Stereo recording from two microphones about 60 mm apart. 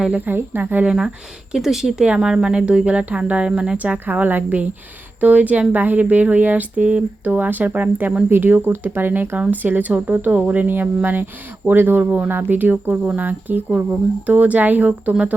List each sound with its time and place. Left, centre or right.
0.3 s speech: right
0.9 s speech: centre; by 12.0 s right
12.0 s speech: right